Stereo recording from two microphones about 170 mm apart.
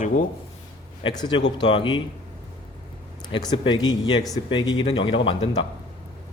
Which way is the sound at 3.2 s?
25° left (ahead or behind).